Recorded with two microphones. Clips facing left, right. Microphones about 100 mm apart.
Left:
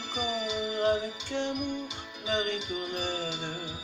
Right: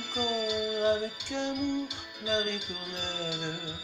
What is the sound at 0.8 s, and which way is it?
Music, 55° left (ahead or behind).